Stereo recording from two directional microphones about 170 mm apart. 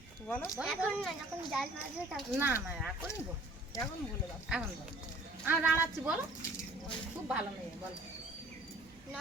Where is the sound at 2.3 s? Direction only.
10° right (ahead or behind).